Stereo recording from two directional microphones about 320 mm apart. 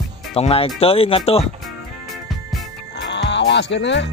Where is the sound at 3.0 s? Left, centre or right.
Left.